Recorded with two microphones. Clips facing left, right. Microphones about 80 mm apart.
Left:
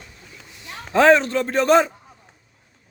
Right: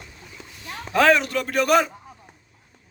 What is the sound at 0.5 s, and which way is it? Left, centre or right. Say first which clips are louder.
A man's voice: left 3 dB; left.